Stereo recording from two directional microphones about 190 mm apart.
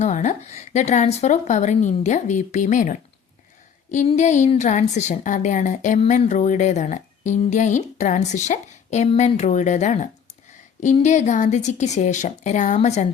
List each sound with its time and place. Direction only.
0.0 s a woman's voice: 40° left (ahead or behind)